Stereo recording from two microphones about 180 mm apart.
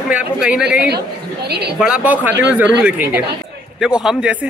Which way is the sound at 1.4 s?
65° right (ahead or behind).